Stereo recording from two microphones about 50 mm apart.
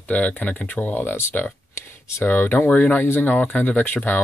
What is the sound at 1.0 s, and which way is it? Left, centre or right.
Speech, left.